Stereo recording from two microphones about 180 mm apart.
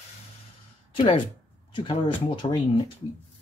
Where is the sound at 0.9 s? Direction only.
25° left (ahead or behind).